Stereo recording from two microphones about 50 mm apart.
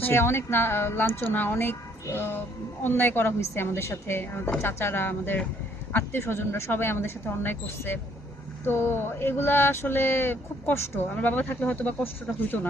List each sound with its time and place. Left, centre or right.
0.0 s speech: left
3.5 s a woman's voice: left
6.1 s a woman's voice: left
6.7 s speech: left
11.1 s speech: left